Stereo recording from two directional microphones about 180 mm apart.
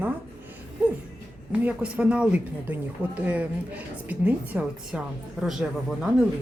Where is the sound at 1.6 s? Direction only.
5° right (ahead or behind).